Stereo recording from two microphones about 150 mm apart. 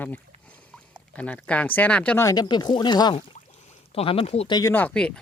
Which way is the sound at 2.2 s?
25° left (ahead or behind).